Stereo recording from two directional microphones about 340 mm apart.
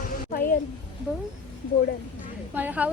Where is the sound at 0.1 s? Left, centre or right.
Left.